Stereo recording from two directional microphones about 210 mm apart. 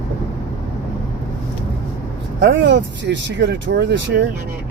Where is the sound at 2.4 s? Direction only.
55° right (ahead or behind).